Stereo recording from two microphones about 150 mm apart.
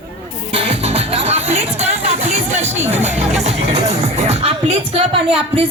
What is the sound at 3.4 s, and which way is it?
Speech, 45° right (ahead or behind).